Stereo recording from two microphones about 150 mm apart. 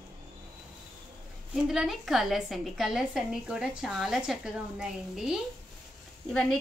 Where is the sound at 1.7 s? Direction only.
Centre (ahead or behind).